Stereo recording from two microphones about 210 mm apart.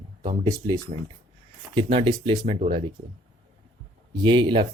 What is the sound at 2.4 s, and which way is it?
Speech, 30° right (ahead or behind).